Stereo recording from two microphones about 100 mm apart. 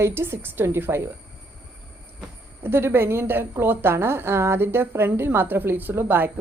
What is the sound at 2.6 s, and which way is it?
A woman's voice, 25° right (ahead or behind).